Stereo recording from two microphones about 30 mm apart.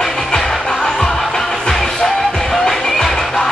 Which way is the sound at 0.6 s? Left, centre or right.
Left.